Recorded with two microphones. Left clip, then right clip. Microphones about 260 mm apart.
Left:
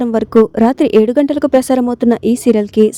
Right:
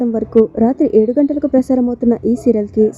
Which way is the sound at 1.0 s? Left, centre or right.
Left.